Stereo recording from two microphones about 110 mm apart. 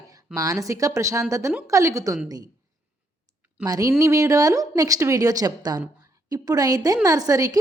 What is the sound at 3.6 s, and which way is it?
Speech, 35° right (ahead or behind).